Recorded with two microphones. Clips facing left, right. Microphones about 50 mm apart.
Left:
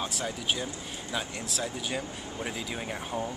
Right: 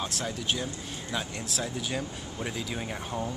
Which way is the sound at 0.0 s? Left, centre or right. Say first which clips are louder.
Even; centre.